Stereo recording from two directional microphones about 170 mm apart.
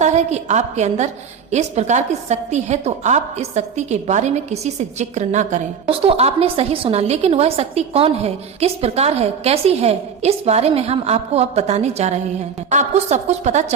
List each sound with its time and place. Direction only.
0.0 s a woman's voice: 40° right (ahead or behind)